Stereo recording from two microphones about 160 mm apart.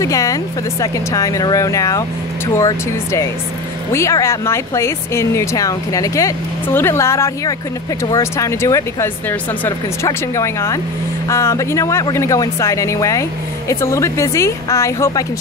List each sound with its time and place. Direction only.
0.0 s a woman's voice: 20° left (ahead or behind)